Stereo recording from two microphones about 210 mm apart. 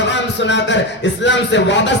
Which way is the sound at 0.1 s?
55° left (ahead or behind).